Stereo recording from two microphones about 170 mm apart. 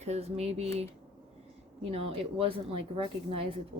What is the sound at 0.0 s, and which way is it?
Speech, 40° right (ahead or behind).